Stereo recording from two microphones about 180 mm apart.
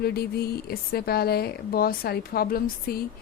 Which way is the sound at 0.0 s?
60° left (ahead or behind).